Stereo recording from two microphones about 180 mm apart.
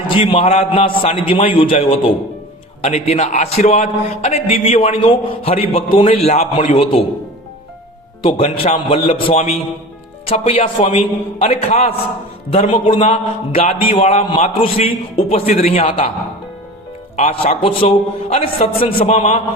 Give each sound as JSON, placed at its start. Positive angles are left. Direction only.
{"t": 0.1, "sound": "a man's voice", "side_deg": 30}
{"t": 8.2, "sound": "a man's voice", "side_deg": 30}
{"t": 17.2, "sound": "a man's voice", "side_deg": 35}